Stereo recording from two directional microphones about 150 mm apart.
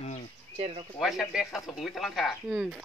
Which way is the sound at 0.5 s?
45° right (ahead or behind).